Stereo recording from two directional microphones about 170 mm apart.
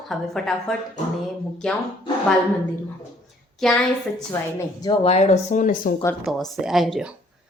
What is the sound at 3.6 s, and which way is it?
Speech, 5° left (ahead or behind).